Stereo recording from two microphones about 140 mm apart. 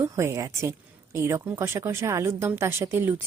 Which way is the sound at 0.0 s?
20° right (ahead or behind).